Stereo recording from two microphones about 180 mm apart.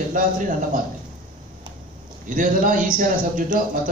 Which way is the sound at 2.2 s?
50° right (ahead or behind).